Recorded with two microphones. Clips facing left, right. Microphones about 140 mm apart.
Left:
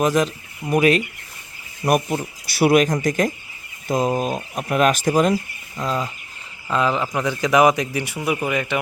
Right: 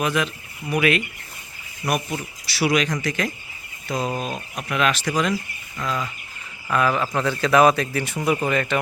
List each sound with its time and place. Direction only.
0.0 s speech: 40° left (ahead or behind)
1.8 s speech: 25° left (ahead or behind)
2.5 s speech: 50° left (ahead or behind)
5.7 s speech: 35° left (ahead or behind)
6.7 s speech: 20° left (ahead or behind)